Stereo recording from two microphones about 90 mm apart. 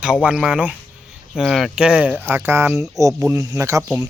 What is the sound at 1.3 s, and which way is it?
Speech, 5° right (ahead or behind).